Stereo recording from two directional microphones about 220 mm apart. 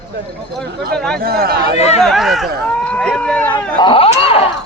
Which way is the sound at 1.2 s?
45° right (ahead or behind).